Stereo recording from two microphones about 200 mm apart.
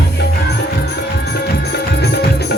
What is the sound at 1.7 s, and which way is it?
Music, 55° left (ahead or behind).